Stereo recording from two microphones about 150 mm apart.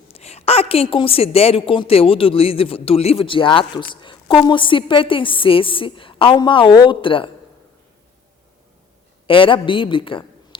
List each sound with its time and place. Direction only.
0.1 s a woman's voice: 45° left (ahead or behind)
9.2 s a man's voice: 35° left (ahead or behind)